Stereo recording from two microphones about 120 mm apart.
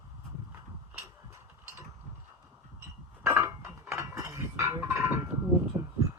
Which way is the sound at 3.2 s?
20° right (ahead or behind).